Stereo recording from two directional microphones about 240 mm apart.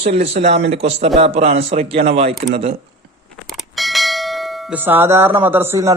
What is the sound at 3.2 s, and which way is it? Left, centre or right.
Bell, centre.